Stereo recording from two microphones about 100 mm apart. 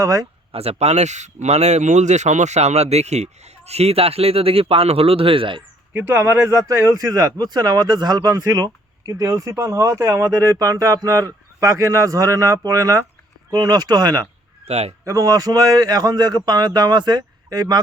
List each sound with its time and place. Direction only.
0.0 s speech: 35° right (ahead or behind)
0.5 s a man's voice: 85° right; by 5.6 s 60° right (ahead or behind)
5.9 s speech: 20° right (ahead or behind); by 14.3 s 45° right (ahead or behind)
14.7 s speech: 90° right
15.0 s speech: 35° right (ahead or behind)